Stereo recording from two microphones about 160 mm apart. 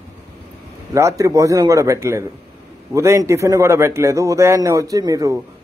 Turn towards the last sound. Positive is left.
turn(degrees=-20)  # may be behind; listen again after turning